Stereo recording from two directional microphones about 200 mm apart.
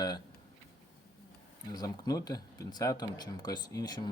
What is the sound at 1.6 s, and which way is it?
Speech, 20° left (ahead or behind).